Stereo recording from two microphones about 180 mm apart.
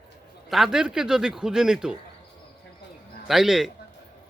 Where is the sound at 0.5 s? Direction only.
Centre (ahead or behind).